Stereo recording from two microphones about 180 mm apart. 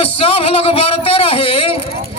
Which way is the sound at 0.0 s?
35° left (ahead or behind).